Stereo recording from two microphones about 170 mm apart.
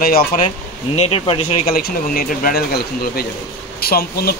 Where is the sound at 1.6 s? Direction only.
60° left (ahead or behind).